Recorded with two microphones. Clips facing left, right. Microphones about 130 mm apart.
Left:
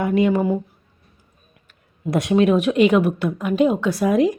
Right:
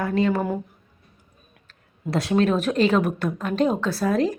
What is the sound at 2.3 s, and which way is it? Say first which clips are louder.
A woman's voice: left 4 dB; 10° left (ahead or behind).